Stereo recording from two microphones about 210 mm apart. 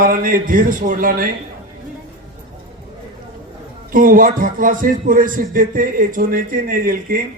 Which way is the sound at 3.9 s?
40° right (ahead or behind).